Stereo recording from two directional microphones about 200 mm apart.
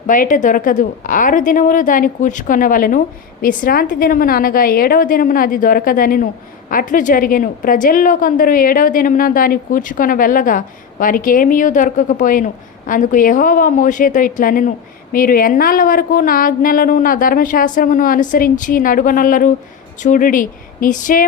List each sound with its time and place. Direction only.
0.1 s a woman's voice: 40° left (ahead or behind)